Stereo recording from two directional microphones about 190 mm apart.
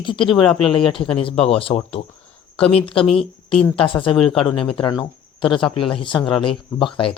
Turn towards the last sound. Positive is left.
turn(degrees=25)  # may be behind; listen again after turning